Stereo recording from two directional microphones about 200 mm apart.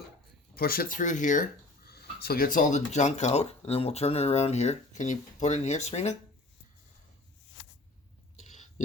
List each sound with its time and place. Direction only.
0.5 s speech: 50° left (ahead or behind)